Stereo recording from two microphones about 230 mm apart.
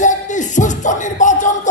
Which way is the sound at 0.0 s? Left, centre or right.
Left.